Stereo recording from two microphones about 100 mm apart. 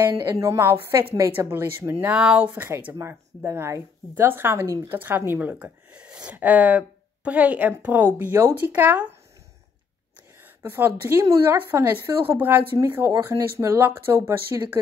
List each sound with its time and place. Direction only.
0.1 s speech: 35° right (ahead or behind)
2.1 s speech: 15° right (ahead or behind)
10.6 s speech: 25° right (ahead or behind)